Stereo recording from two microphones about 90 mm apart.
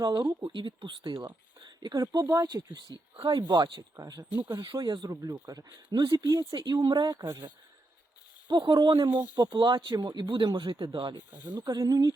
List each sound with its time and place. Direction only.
0.0 s speech: 50° right (ahead or behind)
1.6 s speech: 50° right (ahead or behind)
3.9 s speech: 40° right (ahead or behind)
4.7 s speech: 55° right (ahead or behind)
8.4 s speech: 55° right (ahead or behind)
11.3 s speech: 25° right (ahead or behind)
11.5 s speech: 45° right (ahead or behind)